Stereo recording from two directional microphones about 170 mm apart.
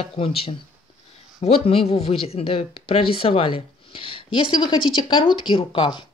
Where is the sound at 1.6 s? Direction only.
35° left (ahead or behind).